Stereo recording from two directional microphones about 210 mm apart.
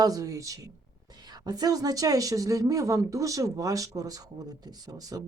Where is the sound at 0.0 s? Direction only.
15° right (ahead or behind).